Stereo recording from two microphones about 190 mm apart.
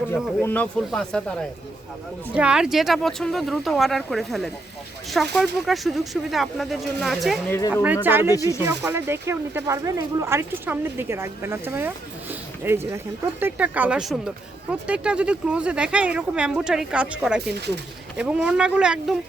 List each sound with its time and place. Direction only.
0.4 s speech: 5° left (ahead or behind); by 8.3 s 10° right (ahead or behind)
8.3 s speech: 15° left (ahead or behind)
8.6 s speech: 15° right (ahead or behind)